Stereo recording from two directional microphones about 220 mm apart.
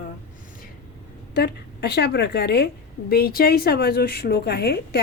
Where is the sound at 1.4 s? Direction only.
50° left (ahead or behind).